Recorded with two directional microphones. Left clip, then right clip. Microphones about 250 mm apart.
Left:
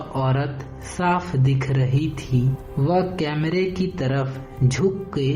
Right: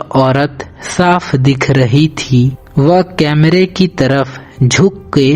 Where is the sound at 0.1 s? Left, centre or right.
Right.